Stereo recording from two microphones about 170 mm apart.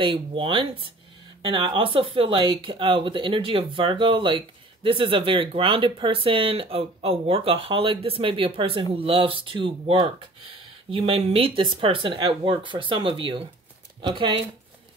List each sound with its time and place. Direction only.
0.0 s speech: 30° right (ahead or behind)